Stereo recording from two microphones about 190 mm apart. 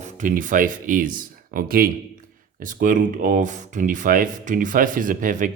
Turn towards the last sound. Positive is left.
turn(degrees=-45)  # may be behind; listen again after turning